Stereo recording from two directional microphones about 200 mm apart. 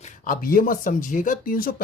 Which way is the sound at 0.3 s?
45° left (ahead or behind).